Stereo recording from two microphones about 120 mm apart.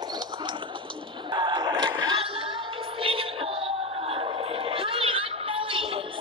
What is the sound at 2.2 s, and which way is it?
Music, 50° right (ahead or behind).